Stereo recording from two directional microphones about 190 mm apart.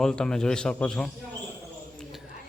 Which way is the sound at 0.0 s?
5° left (ahead or behind).